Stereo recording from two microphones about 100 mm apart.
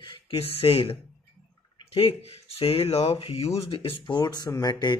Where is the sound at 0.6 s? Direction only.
65° left (ahead or behind).